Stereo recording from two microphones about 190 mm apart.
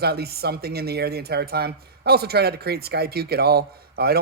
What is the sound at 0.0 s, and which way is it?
Speech, 55° right (ahead or behind).